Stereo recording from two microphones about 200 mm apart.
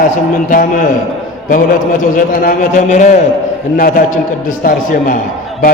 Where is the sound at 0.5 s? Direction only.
45° left (ahead or behind).